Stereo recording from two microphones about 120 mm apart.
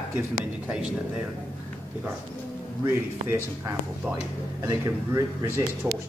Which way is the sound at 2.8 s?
20° right (ahead or behind).